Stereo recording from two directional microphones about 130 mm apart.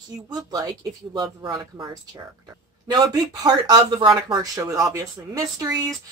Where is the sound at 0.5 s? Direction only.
30° right (ahead or behind).